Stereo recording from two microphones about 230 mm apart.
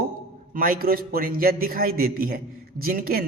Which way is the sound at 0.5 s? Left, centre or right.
Right.